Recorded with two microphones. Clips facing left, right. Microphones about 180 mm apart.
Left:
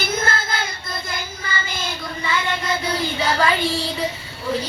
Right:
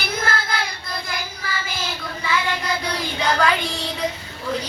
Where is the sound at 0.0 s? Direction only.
Centre (ahead or behind).